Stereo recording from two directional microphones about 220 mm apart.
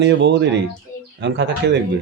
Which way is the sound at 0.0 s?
50° right (ahead or behind).